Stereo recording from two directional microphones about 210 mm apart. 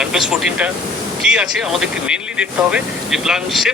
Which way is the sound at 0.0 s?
5° right (ahead or behind).